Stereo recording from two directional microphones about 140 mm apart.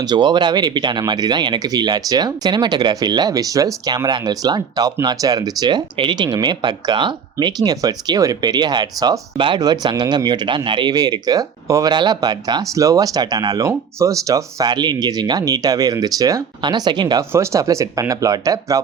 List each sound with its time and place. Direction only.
0.0 s speech: 30° right (ahead or behind)
17.3 s speech: 20° right (ahead or behind)